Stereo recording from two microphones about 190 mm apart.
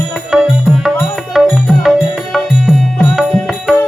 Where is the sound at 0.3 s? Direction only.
Centre (ahead or behind).